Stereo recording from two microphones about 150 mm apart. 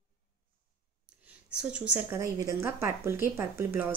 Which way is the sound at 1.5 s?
5° right (ahead or behind).